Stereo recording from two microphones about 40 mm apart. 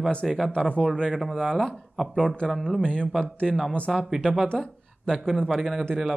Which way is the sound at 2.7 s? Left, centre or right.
Centre.